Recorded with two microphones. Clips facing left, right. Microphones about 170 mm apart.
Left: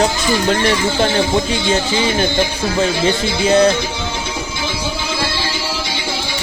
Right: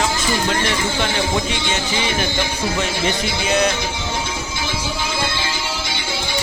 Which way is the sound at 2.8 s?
30° left (ahead or behind).